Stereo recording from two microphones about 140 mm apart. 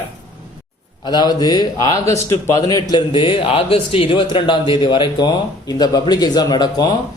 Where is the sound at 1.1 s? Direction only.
30° left (ahead or behind).